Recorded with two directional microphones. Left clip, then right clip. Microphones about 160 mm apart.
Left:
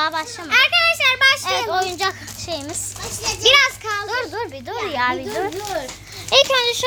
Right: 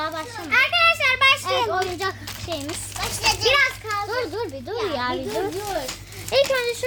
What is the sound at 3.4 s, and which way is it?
Speech, 40° left (ahead or behind).